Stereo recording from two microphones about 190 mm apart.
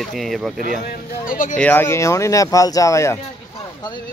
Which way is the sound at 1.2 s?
45° left (ahead or behind).